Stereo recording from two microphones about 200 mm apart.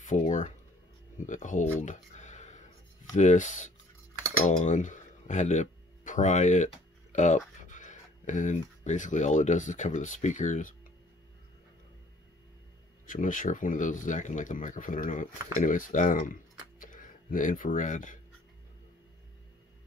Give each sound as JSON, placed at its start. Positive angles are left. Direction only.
{"t": 0.0, "sound": "speech", "side_deg": 40}
{"t": 1.1, "sound": "a sound", "side_deg": 40}
{"t": 3.2, "sound": "speech", "side_deg": 40}
{"t": 13.0, "sound": "speech", "side_deg": 40}